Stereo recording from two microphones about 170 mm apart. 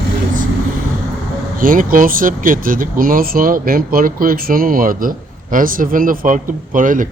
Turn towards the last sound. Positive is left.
turn(degrees=-50)  # may be behind; listen again after turning